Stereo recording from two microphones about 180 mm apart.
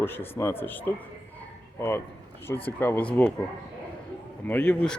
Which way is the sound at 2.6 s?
10° left (ahead or behind).